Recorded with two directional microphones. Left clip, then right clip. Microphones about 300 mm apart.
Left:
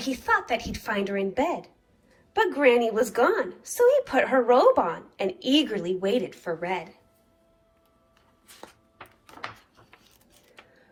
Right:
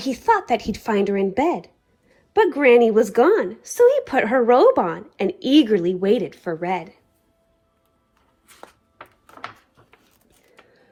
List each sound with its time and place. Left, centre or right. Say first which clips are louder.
0.0 s a woman's voice: right 6 dB; centre